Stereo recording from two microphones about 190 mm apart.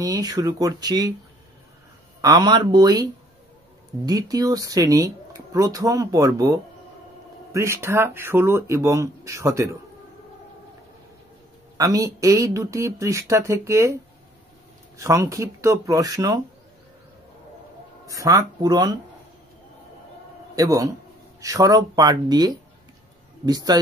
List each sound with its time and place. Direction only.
0.0 s speech: 20° right (ahead or behind)
2.2 s speech: 20° right (ahead or behind)
11.7 s speech: 20° right (ahead or behind)
15.0 s speech: 15° right (ahead or behind)
18.0 s speech: 20° right (ahead or behind)
20.5 s speech: 20° right (ahead or behind)